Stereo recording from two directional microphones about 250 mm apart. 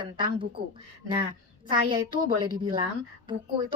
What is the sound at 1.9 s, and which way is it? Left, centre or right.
A woman's voice, centre.